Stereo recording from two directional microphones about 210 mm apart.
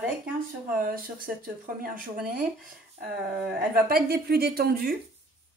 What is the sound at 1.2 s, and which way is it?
Speech, 40° right (ahead or behind).